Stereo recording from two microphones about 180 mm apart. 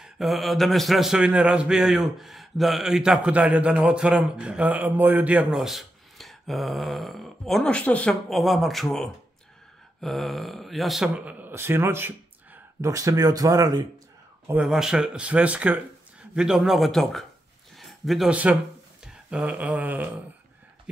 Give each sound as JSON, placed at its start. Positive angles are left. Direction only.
{"t": 0.0, "sound": "speech", "side_deg": 0}
{"t": 14.5, "sound": "speech", "side_deg": -5}
{"t": 19.3, "sound": "a sound", "side_deg": -5}